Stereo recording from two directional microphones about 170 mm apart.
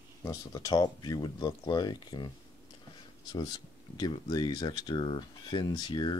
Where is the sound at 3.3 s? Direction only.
25° left (ahead or behind).